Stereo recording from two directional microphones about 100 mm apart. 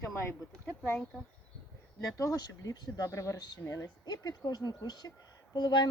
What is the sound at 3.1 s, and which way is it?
Speech, 30° left (ahead or behind).